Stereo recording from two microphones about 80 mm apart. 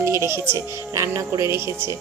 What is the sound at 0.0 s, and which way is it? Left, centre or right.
Speech, right.